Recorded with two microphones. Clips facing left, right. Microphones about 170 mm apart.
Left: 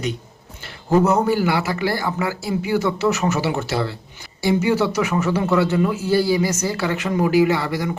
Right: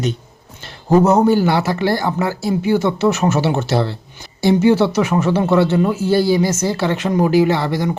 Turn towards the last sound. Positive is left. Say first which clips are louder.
# right 2 dB
turn(degrees=-25)  # may be behind; listen again after turning